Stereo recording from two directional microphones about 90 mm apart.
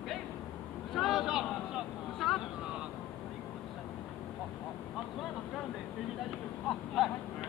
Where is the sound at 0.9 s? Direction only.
Centre (ahead or behind).